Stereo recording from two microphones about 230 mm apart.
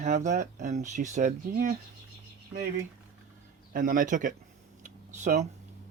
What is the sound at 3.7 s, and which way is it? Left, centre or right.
Speech, right.